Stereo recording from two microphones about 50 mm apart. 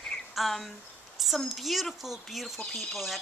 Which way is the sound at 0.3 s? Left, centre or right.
Centre.